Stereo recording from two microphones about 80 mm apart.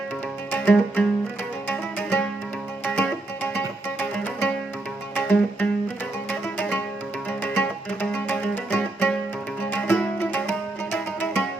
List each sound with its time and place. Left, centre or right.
0.5 s music: centre